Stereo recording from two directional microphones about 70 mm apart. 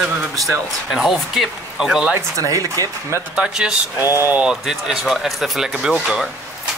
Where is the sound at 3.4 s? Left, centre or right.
Centre.